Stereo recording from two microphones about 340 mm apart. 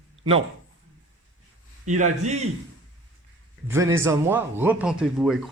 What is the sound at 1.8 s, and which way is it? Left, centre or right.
Speech, right.